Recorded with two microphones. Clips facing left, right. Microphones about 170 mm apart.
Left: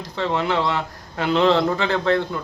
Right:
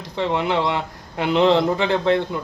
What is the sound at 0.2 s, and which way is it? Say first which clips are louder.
A man's voice: right 1 dB; 20° right (ahead or behind).